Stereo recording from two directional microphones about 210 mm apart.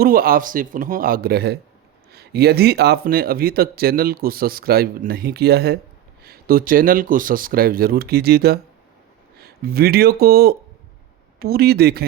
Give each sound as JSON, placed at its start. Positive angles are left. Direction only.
{"t": 0.0, "sound": "speech", "side_deg": -45}